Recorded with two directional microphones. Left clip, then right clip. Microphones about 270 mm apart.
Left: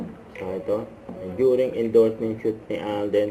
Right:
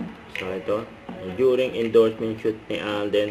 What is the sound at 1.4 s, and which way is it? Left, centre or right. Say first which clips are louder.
Speech: even; centre.